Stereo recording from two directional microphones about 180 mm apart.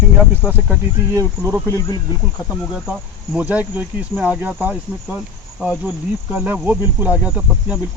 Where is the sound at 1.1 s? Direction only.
15° right (ahead or behind).